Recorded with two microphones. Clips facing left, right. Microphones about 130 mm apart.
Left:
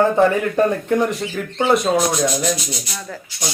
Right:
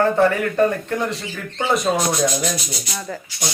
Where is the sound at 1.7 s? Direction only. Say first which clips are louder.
Left 3 dB; centre (ahead or behind).